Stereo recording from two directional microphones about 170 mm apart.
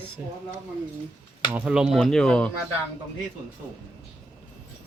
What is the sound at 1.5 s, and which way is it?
Speech, 5° right (ahead or behind).